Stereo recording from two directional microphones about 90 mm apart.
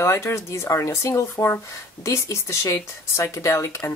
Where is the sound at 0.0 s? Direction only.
30° left (ahead or behind).